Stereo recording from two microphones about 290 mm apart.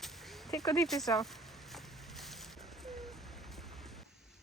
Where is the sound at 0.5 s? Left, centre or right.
Centre.